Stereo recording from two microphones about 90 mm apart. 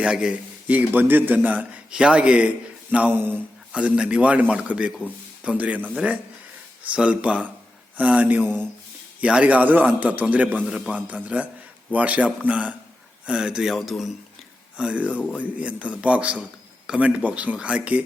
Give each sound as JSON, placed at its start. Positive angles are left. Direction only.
{"t": 0.0, "sound": "a man's voice", "side_deg": -10}
{"t": 2.9, "sound": "a sound", "side_deg": -20}
{"t": 3.7, "sound": "a man's voice", "side_deg": -10}
{"t": 14.8, "sound": "a man's voice", "side_deg": -15}